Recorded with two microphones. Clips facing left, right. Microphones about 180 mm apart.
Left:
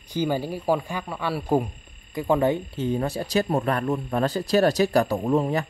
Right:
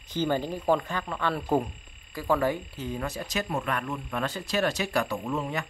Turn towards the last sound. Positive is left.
turn(degrees=35)  # may be behind; listen again after turning